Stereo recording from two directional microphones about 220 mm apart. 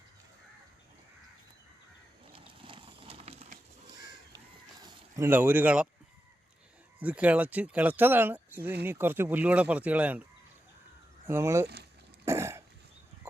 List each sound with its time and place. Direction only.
2.3 s a sound: 25° right (ahead or behind)
4.8 s speech: 15° right (ahead or behind)
7.0 s speech: 5° right (ahead or behind)
11.3 s speech: 10° right (ahead or behind)
12.2 s cough: 10° right (ahead or behind)